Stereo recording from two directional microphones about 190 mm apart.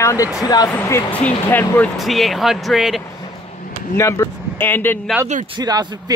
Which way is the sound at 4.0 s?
15° left (ahead or behind).